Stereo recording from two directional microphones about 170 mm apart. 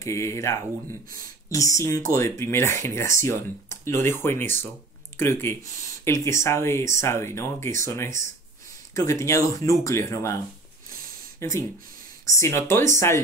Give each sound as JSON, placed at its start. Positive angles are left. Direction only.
{"t": 0.0, "sound": "speech", "side_deg": 15}